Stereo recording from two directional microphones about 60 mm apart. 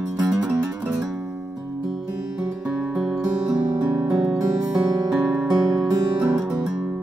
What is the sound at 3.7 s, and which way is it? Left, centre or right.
Music, right.